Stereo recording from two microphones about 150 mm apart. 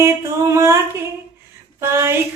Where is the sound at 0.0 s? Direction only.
20° right (ahead or behind).